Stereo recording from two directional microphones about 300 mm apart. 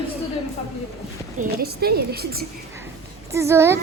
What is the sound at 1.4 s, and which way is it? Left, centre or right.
A woman's voice, right.